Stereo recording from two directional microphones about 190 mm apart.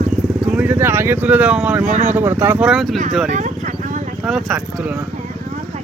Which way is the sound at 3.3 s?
40° right (ahead or behind).